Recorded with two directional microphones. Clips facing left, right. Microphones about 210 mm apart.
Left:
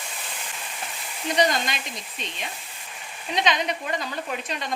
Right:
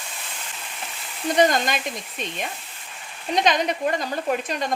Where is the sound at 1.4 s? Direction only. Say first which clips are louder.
Right 4 dB; 50° right (ahead or behind).